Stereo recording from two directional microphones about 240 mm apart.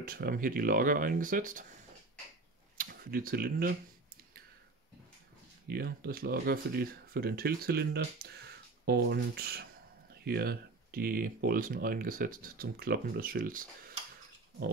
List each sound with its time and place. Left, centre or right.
0.0 s speech: right
2.8 s speech: right
5.7 s speech: right